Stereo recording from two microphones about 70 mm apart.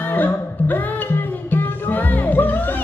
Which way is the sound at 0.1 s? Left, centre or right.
Left.